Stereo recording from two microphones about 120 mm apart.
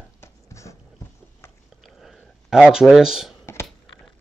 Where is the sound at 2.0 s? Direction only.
Centre (ahead or behind).